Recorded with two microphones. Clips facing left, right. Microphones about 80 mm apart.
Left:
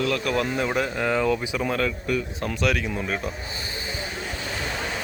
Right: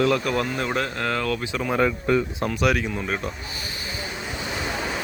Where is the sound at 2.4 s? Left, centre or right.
Centre.